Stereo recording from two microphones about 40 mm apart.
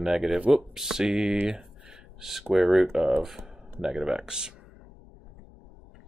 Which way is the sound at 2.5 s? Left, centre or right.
Centre.